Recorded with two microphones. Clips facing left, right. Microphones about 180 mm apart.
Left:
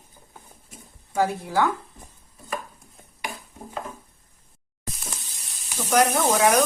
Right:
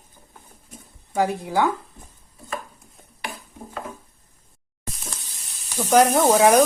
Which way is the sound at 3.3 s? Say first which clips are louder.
Right 1 dB; 15° left (ahead or behind).